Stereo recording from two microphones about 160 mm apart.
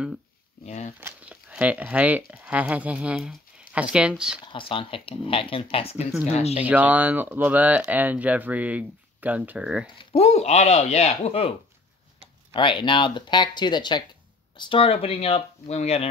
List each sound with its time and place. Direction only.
1.0 s speech: 10° right (ahead or behind)
4.5 s speech: 35° left (ahead or behind)
6.6 s speech: 10° right (ahead or behind)
9.9 s speech: 40° left (ahead or behind)
12.5 s speech: 30° left (ahead or behind)